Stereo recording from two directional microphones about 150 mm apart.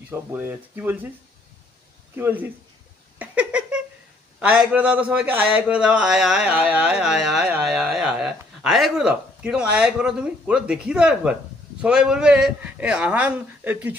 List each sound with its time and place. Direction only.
0.1 s a man's voice: 10° right (ahead or behind)
2.1 s a man's voice: 15° right (ahead or behind)
3.2 s a sound: 10° right (ahead or behind)
4.4 s a man's voice: 10° right (ahead or behind)